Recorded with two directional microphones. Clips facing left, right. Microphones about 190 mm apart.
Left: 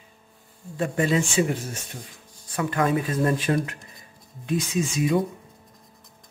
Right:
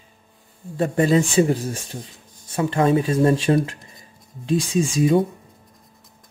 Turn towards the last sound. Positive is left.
turn(degrees=-30)  # may be behind; listen again after turning